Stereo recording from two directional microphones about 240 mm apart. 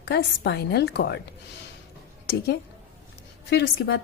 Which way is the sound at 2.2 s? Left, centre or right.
Left.